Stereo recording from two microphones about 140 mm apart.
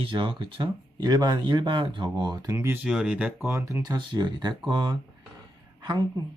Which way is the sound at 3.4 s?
20° right (ahead or behind).